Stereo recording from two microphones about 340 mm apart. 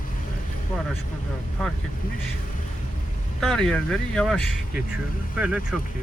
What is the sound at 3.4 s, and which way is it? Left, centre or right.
Speech, centre.